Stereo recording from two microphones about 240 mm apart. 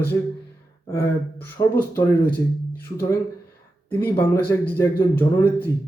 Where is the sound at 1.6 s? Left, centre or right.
Centre.